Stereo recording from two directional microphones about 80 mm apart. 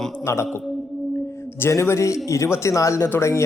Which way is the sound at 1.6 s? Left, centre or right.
Left.